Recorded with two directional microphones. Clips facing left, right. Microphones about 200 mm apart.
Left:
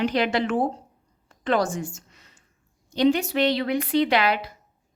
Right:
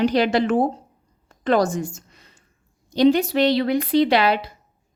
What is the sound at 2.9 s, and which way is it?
A woman's voice, 35° right (ahead or behind).